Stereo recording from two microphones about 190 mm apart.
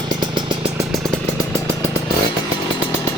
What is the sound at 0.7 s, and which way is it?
Vehicle, centre (ahead or behind).